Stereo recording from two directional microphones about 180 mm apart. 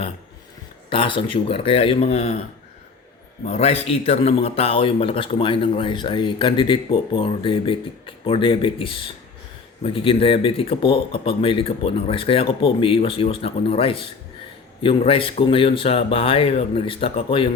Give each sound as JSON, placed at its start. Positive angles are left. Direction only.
{"t": 0.9, "sound": "speech", "side_deg": 30}
{"t": 3.5, "sound": "a man's voice", "side_deg": 35}